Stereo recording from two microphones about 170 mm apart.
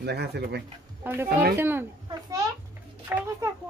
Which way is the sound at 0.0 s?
75° right (ahead or behind).